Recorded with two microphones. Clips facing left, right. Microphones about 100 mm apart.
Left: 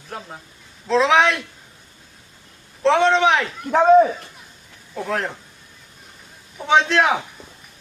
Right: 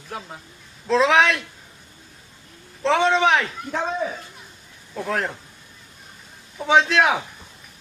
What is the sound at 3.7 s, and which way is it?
Speech, 55° left (ahead or behind).